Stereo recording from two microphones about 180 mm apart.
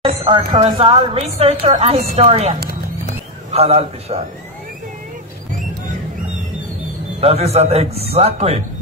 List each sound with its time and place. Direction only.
0.0 s a sound: 25° right (ahead or behind)
0.6 s speech: 35° right (ahead or behind)
3.5 s speech: 35° right (ahead or behind)
7.2 s speech: 35° right (ahead or behind)